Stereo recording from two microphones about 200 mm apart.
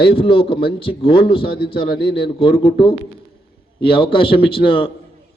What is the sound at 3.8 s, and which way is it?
A man's voice, 25° left (ahead or behind).